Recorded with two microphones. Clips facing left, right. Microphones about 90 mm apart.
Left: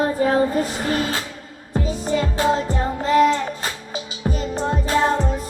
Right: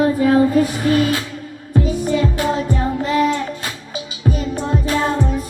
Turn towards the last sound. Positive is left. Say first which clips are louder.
# even
turn(degrees=30)  # may be behind; listen again after turning